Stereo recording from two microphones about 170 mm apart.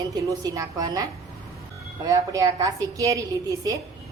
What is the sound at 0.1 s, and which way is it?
Speech, 20° right (ahead or behind).